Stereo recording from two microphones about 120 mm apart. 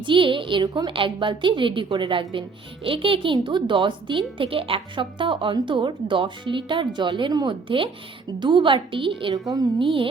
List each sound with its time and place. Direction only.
0.0 s speech: 45° right (ahead or behind)
9.5 s a woman's voice: 30° right (ahead or behind)
9.8 s speech: 45° right (ahead or behind)